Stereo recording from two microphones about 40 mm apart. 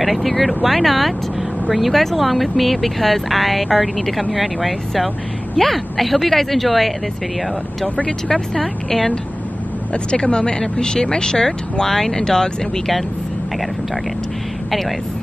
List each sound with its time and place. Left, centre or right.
0.0 s speech: centre
8.3 s speech: centre
10.1 s speech: left